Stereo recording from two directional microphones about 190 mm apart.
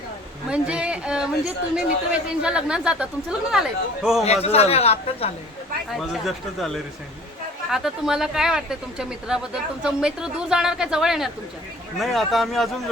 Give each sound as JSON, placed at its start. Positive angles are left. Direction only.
{"t": 0.5, "sound": "speech", "side_deg": -5}
{"t": 4.3, "sound": "speech", "side_deg": 35}
{"t": 5.9, "sound": "speech", "side_deg": 0}